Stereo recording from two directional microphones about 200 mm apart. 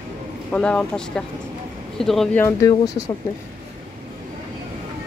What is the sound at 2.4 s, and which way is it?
Speech, 15° left (ahead or behind).